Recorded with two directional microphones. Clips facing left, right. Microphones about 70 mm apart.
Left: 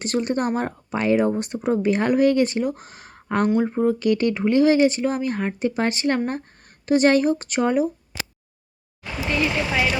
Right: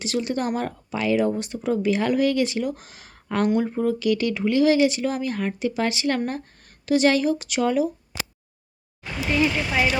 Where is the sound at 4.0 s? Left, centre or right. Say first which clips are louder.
Left 2 dB; left.